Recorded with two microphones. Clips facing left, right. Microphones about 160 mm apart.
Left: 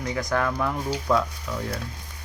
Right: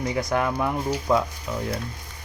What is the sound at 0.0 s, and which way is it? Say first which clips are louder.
Speech: right 2 dB; 25° right (ahead or behind).